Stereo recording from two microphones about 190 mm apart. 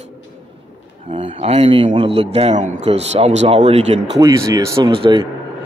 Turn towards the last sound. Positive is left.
turn(degrees=-25)  # may be behind; listen again after turning